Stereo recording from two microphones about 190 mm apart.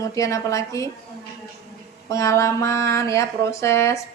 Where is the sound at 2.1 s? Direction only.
15° left (ahead or behind).